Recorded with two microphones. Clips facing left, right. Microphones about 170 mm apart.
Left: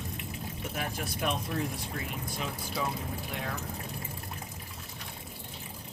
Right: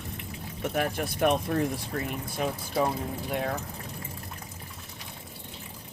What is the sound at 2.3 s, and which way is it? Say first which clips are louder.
Speech: right 9 dB; 50° right (ahead or behind).